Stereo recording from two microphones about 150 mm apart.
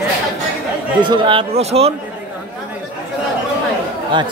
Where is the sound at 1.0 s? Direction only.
35° right (ahead or behind).